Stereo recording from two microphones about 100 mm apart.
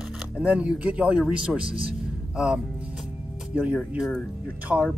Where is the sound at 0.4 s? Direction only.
10° right (ahead or behind).